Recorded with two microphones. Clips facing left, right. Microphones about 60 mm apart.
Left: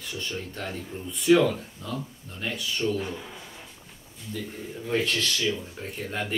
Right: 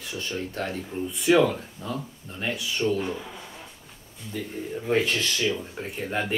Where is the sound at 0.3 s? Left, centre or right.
Centre.